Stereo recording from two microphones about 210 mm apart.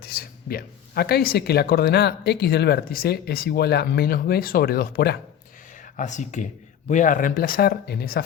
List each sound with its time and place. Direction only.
0.0 s speech: 45° left (ahead or behind)
5.7 s a sound: 40° left (ahead or behind)
6.8 s speech: 35° left (ahead or behind)